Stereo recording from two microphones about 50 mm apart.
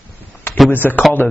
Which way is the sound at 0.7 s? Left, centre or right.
Left.